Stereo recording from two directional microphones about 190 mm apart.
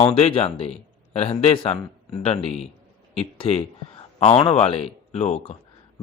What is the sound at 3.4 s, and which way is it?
Speech, 30° left (ahead or behind).